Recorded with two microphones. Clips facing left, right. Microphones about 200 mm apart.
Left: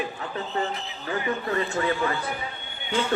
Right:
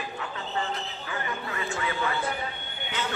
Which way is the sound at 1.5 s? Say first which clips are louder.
Left 7 dB; 40° left (ahead or behind).